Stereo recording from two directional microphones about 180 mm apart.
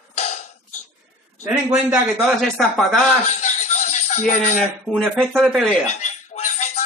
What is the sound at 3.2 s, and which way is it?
Music, 40° left (ahead or behind).